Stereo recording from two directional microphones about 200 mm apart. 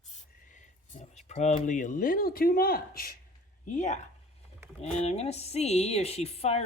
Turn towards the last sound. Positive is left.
turn(degrees=30)  # may be behind; listen again after turning